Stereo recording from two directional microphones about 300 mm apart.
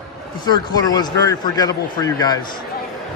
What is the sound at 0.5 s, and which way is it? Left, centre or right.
Speech, centre.